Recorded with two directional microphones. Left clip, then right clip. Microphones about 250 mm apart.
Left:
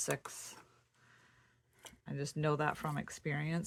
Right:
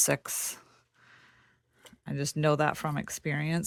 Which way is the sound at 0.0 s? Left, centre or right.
Right.